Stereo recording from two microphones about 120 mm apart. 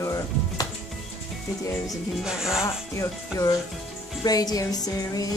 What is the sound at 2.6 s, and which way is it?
Speech, 25° left (ahead or behind).